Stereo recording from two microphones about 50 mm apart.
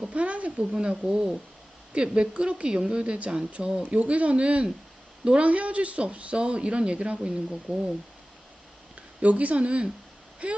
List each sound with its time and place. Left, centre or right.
0.0 s speech: right
0.6 s speech: centre
3.8 s speech: right
5.5 s speech: right
9.2 s speech: right